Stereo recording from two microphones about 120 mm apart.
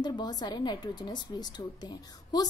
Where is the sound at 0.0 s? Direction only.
35° left (ahead or behind).